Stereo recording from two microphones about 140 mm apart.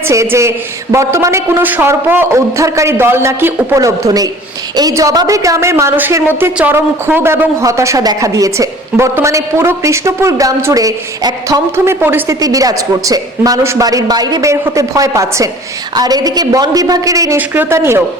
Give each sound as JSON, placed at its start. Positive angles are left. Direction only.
{"t": 0.1, "sound": "a woman's voice", "side_deg": -20}